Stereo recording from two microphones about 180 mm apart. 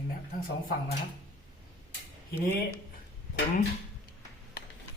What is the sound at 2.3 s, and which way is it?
Speech, 10° left (ahead or behind).